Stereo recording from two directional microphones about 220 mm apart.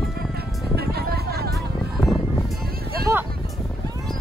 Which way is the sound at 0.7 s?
45° right (ahead or behind).